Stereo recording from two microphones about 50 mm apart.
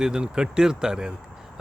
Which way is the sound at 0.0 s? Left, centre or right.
Centre.